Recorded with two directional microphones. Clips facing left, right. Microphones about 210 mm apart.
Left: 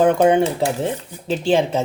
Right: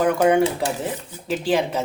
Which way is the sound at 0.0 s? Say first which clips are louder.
Left 3 dB; 25° left (ahead or behind).